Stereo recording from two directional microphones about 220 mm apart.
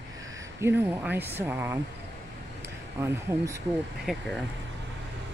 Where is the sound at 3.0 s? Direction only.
15° right (ahead or behind).